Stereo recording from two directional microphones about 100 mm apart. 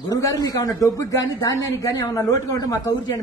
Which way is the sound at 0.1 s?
35° left (ahead or behind).